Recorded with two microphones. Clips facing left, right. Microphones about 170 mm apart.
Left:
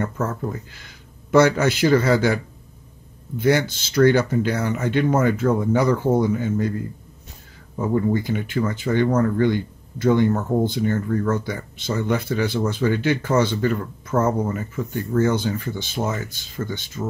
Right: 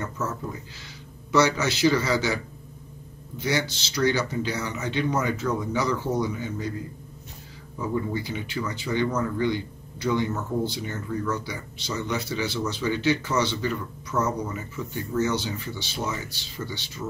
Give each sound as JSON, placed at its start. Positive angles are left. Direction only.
{"t": 0.0, "sound": "speech", "side_deg": 55}
{"t": 7.7, "sound": "speech", "side_deg": 50}